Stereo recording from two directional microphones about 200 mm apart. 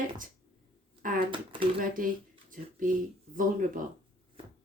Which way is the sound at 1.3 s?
25° right (ahead or behind).